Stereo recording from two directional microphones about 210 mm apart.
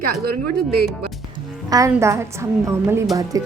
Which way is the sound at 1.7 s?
15° right (ahead or behind).